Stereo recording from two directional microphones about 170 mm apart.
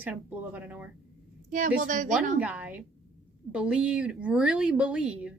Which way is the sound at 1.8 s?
50° right (ahead or behind).